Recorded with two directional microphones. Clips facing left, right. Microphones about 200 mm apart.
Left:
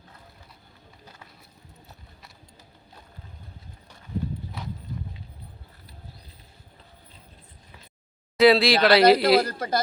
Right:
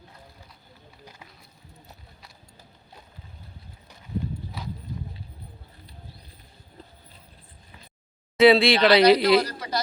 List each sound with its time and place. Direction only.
8.4 s speech: centre (ahead or behind)
9.0 s speech: 50° left (ahead or behind)